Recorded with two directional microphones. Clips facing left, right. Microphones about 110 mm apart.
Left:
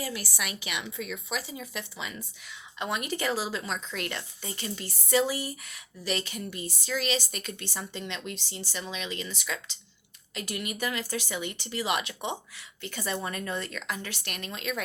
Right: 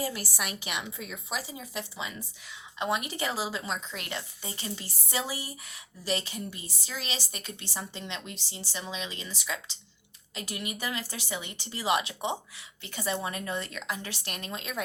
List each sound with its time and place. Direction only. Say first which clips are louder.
0.0 s a woman's voice: right 1 dB; 35° right (ahead or behind)